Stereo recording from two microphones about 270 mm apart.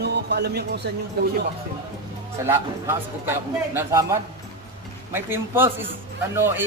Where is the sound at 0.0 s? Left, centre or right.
Right.